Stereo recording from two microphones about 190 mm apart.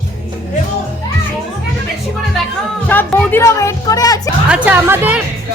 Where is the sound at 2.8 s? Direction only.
10° left (ahead or behind).